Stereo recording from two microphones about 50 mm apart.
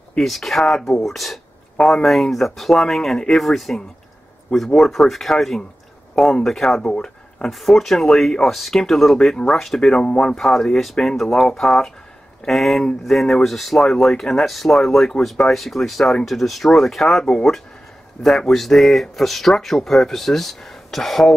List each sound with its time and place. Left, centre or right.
0.2 s speech: centre
6.9 s a sound: left
7.4 s speech: centre
10.3 s speech: centre